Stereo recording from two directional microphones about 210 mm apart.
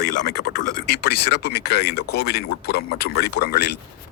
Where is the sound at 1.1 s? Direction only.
50° left (ahead or behind).